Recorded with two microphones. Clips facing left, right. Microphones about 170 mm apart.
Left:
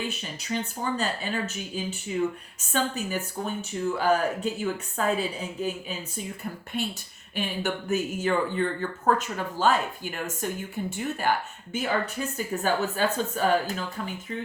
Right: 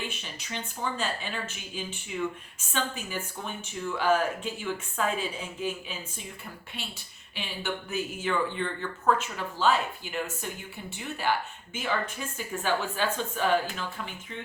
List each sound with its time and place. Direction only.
0.1 s speech: 40° left (ahead or behind)